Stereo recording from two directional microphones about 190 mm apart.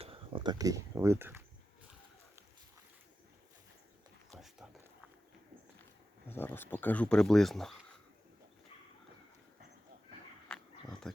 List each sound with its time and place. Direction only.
0.0 s speech: 30° right (ahead or behind); by 1.4 s 15° right (ahead or behind)
6.2 s speech: 10° left (ahead or behind)
11.1 s speech: 5° left (ahead or behind)